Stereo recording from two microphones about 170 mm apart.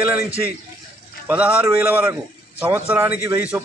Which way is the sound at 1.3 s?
10° right (ahead or behind).